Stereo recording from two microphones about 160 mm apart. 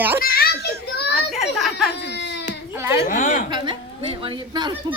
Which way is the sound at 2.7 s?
15° right (ahead or behind).